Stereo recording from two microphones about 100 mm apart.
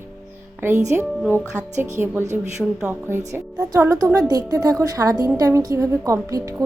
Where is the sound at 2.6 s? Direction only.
Centre (ahead or behind).